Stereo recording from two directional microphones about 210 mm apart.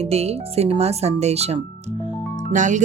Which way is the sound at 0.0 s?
30° right (ahead or behind).